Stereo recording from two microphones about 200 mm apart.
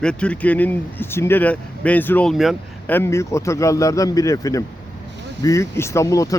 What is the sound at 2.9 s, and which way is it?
Speech, 15° left (ahead or behind).